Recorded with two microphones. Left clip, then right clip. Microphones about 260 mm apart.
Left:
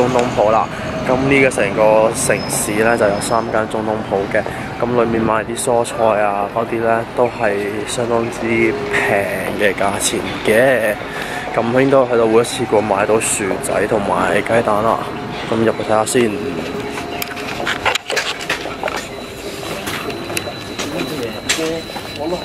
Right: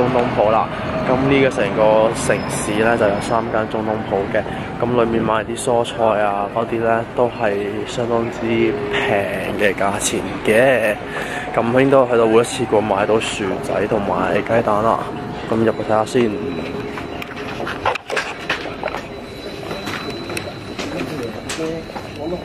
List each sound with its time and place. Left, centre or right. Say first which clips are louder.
0.0 s speech: left 2 dB; centre
3.7 s speech: left 2 dB; centre
4.9 s speech: left 1 dB; centre
5.7 s speech: left 2 dB; centre
8.1 s speech: left 2 dB; centre